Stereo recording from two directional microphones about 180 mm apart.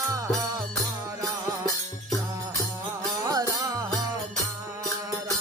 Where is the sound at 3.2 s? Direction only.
20° right (ahead or behind).